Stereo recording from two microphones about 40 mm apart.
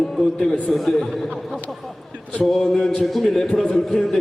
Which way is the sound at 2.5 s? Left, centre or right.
Centre.